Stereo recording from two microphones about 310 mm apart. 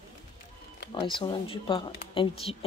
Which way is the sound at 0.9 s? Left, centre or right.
Centre.